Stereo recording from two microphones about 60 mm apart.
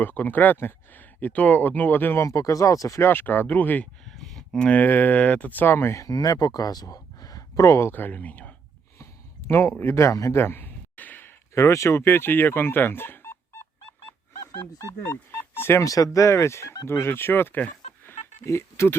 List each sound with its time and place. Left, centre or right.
0.0 s speech: left
2.1 s speech: left
3.0 s speech: left
4.0 s a sound: centre
4.8 s speech: left
6.0 s speech: left
7.9 s speech: left
9.0 s a sound: left
10.3 s a sound: left
11.5 s speech: left
15.0 s speech: left
15.8 s speech: left
16.1 s speech: left
18.4 s speech: left